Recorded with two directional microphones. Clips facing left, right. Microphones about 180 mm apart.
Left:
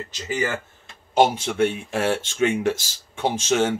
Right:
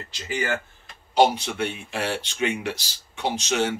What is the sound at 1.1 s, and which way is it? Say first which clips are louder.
Speech: left 1 dB; 50° left (ahead or behind).